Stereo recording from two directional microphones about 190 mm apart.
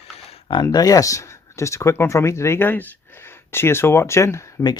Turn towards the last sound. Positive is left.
turn(degrees=20)  # may be behind; listen again after turning